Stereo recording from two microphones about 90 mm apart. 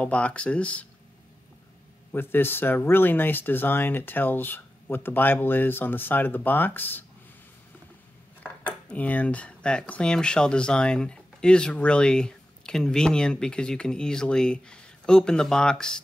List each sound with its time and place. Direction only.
0.0 s speech: 15° left (ahead or behind)
2.1 s speech: 25° left (ahead or behind)
8.4 s speech: 15° left (ahead or behind)